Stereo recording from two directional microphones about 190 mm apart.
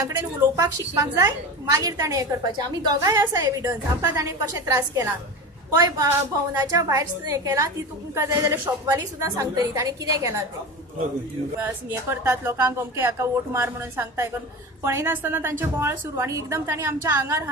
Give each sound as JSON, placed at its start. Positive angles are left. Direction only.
{"t": 0.0, "sound": "speech", "side_deg": -15}
{"t": 11.6, "sound": "speech", "side_deg": -10}